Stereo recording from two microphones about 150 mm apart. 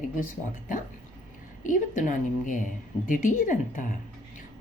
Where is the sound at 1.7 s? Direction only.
60° left (ahead or behind).